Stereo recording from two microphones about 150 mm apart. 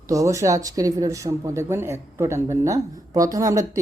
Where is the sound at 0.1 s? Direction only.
20° right (ahead or behind).